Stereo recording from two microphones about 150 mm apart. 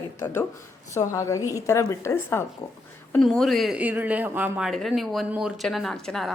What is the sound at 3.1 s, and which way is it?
Speech, 5° left (ahead or behind).